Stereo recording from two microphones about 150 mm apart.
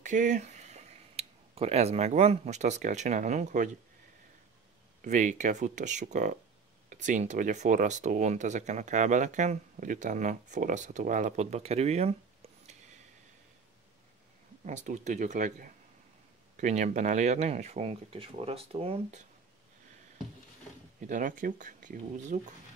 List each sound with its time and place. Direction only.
0.0 s speech: 55° right (ahead or behind)
5.0 s speech: 55° right (ahead or behind)
14.6 s speech: 55° right (ahead or behind)
21.1 s speech: 60° right (ahead or behind)